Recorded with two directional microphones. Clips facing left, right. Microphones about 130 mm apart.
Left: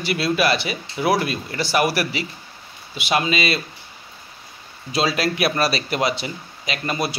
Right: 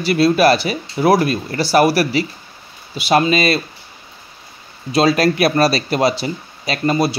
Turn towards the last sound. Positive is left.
turn(degrees=-30)  # may be behind; listen again after turning